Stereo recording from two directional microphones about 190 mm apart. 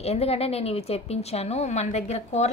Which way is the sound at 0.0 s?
35° left (ahead or behind).